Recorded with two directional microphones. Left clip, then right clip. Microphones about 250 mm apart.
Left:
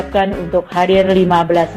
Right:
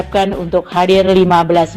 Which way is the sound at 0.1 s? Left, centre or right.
Right.